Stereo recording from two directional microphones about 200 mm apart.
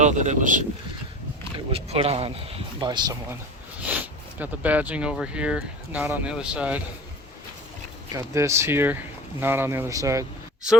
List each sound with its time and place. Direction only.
0.0 s speech: 35° right (ahead or behind)
1.5 s speech: 30° right (ahead or behind)
2.8 s speech: 20° right (ahead or behind)
4.4 s speech: 10° right (ahead or behind)
8.1 s speech: 15° right (ahead or behind)